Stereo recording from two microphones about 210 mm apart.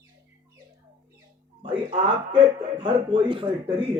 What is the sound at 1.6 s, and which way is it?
Speech, 25° right (ahead or behind).